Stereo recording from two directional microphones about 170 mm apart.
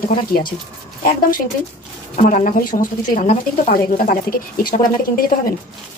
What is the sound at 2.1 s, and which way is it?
A woman's voice, 50° left (ahead or behind).